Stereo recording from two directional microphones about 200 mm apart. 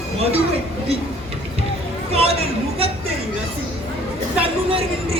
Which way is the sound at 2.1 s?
30° right (ahead or behind).